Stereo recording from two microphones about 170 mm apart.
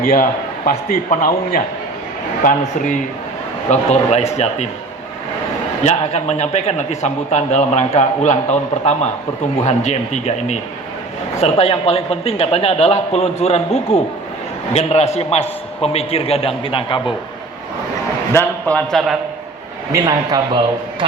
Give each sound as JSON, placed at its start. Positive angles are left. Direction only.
{"t": 0.1, "sound": "a man's voice", "side_deg": 50}
{"t": 2.4, "sound": "a man's voice", "side_deg": 50}
{"t": 5.8, "sound": "a man's voice", "side_deg": 40}
{"t": 18.3, "sound": "a man's voice", "side_deg": 15}
{"t": 18.9, "sound": "a man's voice", "side_deg": 0}
{"t": 19.9, "sound": "speech", "side_deg": -20}